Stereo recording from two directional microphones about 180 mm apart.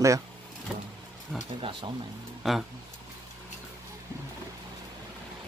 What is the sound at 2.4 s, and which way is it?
Music, centre (ahead or behind).